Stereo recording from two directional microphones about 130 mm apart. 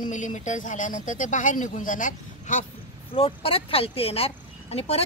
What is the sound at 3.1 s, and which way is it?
Speech, 45° left (ahead or behind).